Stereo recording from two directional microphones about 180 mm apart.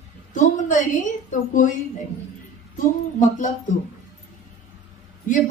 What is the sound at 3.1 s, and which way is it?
Speech, 45° left (ahead or behind).